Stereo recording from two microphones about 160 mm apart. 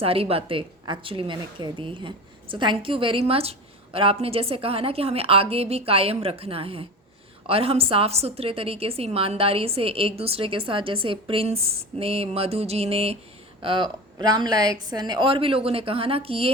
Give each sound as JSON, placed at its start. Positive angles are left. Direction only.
{"t": 0.0, "sound": "a woman's voice", "side_deg": -35}